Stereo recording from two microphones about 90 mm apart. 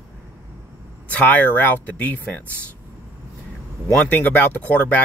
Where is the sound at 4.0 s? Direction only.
20° left (ahead or behind).